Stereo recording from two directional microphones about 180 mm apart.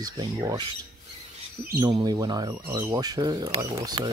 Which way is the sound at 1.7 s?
20° right (ahead or behind).